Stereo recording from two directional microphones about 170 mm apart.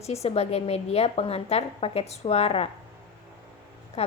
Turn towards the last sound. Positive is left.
turn(degrees=35)  # may be behind; listen again after turning